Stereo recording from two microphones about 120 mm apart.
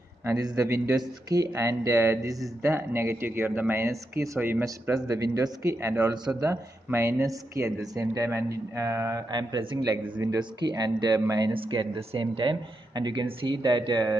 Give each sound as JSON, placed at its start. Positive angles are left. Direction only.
{"t": 0.2, "sound": "speech", "side_deg": -25}
{"t": 4.9, "sound": "speech", "side_deg": -30}
{"t": 9.3, "sound": "speech", "side_deg": -35}
{"t": 11.5, "sound": "speech", "side_deg": -45}